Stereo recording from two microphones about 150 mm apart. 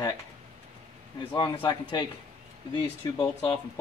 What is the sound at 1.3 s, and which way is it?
Speech, 30° left (ahead or behind).